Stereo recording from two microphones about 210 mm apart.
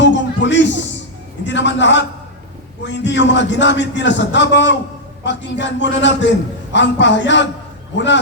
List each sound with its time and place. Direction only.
0.0 s music: 60° left (ahead or behind)
1.5 s a sound: 60° left (ahead or behind)
2.8 s a man's voice: 60° left (ahead or behind)